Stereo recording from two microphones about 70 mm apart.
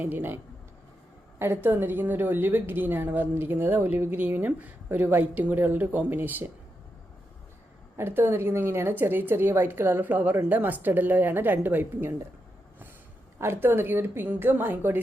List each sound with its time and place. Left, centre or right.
0.0 s a woman's voice: right
1.4 s a woman's voice: right
7.9 s a woman's voice: right
13.4 s a woman's voice: right